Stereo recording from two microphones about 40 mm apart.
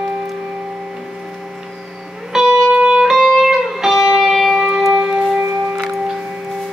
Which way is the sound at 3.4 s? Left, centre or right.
Centre.